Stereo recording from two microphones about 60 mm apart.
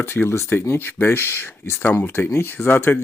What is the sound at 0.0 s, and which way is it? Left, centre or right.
Speech, left.